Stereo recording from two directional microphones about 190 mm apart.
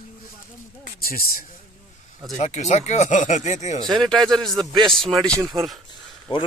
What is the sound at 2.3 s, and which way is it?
Speech, 35° left (ahead or behind).